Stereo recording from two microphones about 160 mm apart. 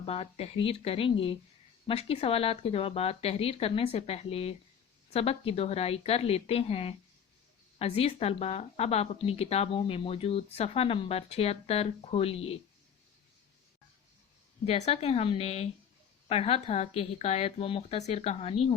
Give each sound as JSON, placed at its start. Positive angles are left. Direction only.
{"t": 0.0, "sound": "a woman's voice", "side_deg": 40}
{"t": 14.7, "sound": "a woman's voice", "side_deg": 40}